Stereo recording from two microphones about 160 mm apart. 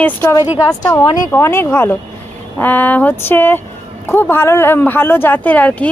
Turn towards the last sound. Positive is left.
turn(degrees=10)  # may be behind; listen again after turning